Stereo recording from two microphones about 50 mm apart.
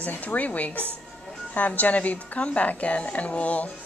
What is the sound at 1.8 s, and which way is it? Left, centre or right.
A woman's voice, left.